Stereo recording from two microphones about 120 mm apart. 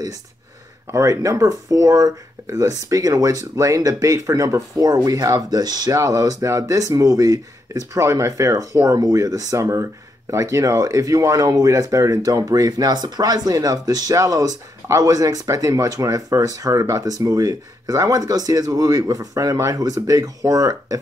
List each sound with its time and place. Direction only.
0.9 s speech: 25° right (ahead or behind)